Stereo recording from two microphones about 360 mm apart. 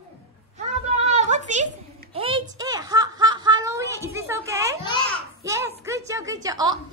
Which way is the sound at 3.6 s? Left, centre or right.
Centre.